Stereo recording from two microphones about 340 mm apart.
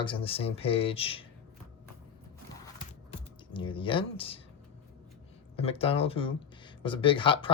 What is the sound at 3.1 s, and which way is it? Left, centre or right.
Speech, centre.